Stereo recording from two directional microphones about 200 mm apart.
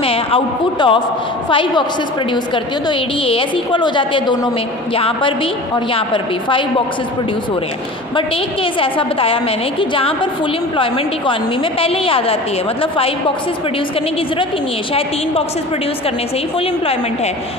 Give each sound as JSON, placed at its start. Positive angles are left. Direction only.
{"t": 0.0, "sound": "a man's voice", "side_deg": 30}
{"t": 8.7, "sound": "a woman's voice", "side_deg": 25}
{"t": 11.8, "sound": "a woman's voice", "side_deg": 25}
{"t": 16.5, "sound": "a woman's voice", "side_deg": 30}